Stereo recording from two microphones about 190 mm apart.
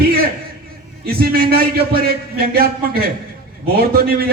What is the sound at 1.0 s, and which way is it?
A man's voice, 55° right (ahead or behind).